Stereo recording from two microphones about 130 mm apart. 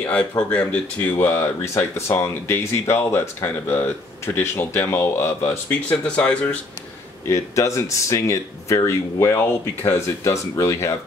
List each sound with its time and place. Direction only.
0.0 s speech: 10° left (ahead or behind)
5.7 s speech: 10° left (ahead or behind)
7.2 s speech: 25° left (ahead or behind)